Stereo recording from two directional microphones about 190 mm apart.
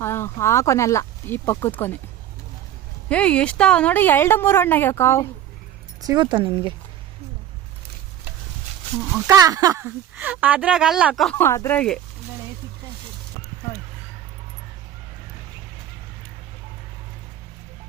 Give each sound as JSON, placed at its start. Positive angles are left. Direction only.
{"t": 0.0, "sound": "a woman's voice", "side_deg": 15}
{"t": 3.1, "sound": "a woman's voice", "side_deg": 5}
{"t": 6.0, "sound": "speech", "side_deg": -20}
{"t": 9.2, "sound": "speech", "side_deg": -15}
{"t": 11.3, "sound": "a woman's voice", "side_deg": 15}